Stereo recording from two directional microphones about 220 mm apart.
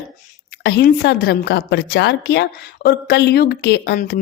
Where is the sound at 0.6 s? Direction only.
45° left (ahead or behind).